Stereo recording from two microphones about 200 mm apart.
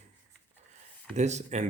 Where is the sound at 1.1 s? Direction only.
35° right (ahead or behind).